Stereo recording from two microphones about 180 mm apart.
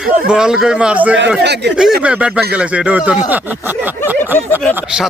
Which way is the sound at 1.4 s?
70° right (ahead or behind).